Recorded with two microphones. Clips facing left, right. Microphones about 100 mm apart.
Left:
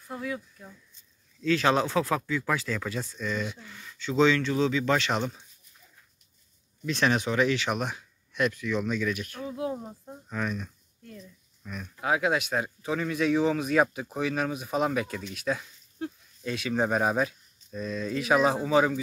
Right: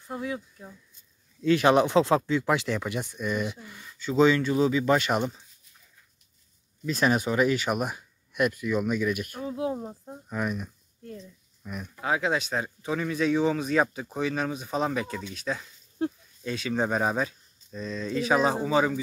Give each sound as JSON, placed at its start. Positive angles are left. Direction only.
{"t": 0.0, "sound": "speech", "side_deg": -25}
{"t": 6.9, "sound": "speech", "side_deg": -5}
{"t": 9.4, "sound": "speech", "side_deg": -25}
{"t": 12.0, "sound": "speech", "side_deg": 5}